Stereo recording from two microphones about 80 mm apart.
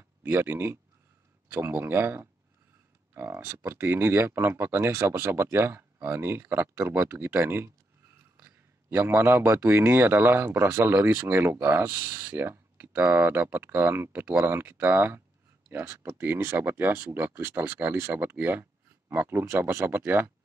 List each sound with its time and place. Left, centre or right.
0.2 s speech: right
8.9 s speech: right